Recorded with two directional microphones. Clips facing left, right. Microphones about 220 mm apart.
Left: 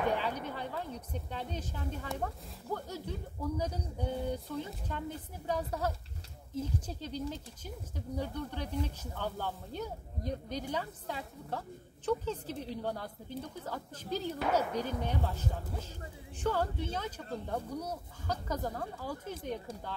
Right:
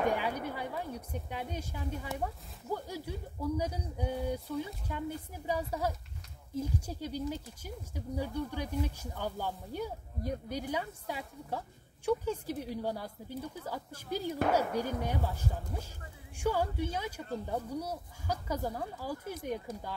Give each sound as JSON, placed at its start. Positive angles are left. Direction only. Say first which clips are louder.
{"t": 0.0, "sound": "speech", "louder": "right 1 dB", "side_deg": -10}
{"t": 19.7, "sound": "speech", "louder": "right 2 dB", "side_deg": 30}